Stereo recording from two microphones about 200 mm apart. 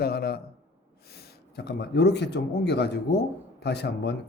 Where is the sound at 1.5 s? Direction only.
55° left (ahead or behind).